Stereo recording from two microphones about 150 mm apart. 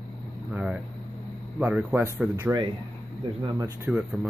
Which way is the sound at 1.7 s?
10° right (ahead or behind).